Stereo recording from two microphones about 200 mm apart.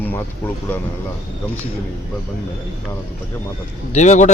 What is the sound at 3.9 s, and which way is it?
Speech, 35° left (ahead or behind).